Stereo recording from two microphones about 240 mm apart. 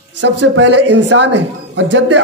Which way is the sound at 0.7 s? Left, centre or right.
Right.